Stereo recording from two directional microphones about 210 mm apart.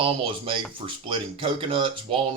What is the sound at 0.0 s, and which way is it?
Speech, 25° right (ahead or behind).